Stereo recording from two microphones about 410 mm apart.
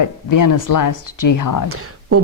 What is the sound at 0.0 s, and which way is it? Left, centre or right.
Speech, left.